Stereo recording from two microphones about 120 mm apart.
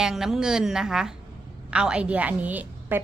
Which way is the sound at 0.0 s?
5° right (ahead or behind).